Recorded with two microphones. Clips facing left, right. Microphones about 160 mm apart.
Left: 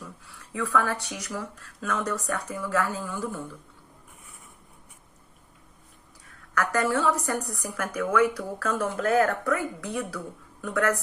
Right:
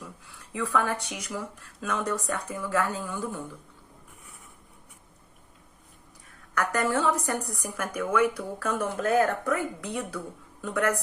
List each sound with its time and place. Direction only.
0.5 s a woman's voice: 20° right (ahead or behind)
6.5 s a woman's voice: 20° right (ahead or behind)